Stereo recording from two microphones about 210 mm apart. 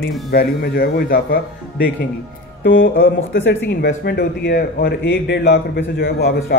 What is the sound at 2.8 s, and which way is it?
Speech, 45° left (ahead or behind).